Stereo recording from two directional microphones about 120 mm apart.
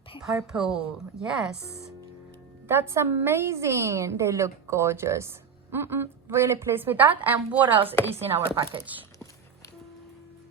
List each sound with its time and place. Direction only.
0.5 s a woman's voice: 5° right (ahead or behind)
2.6 s a woman's voice: 20° right (ahead or behind)